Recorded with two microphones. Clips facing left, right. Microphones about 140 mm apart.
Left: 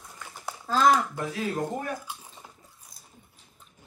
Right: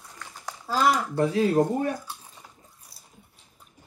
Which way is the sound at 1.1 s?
30° right (ahead or behind).